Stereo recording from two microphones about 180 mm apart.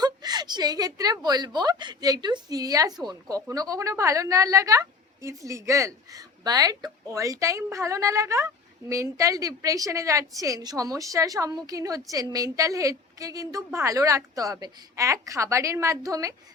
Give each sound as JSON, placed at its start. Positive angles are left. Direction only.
{"t": 0.0, "sound": "a woman's voice", "side_deg": -20}